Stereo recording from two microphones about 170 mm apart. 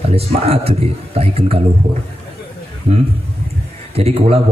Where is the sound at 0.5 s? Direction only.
35° right (ahead or behind).